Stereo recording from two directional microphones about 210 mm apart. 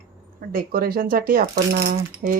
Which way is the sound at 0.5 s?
45° right (ahead or behind).